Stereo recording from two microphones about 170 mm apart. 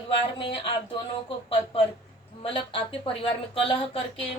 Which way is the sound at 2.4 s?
30° left (ahead or behind).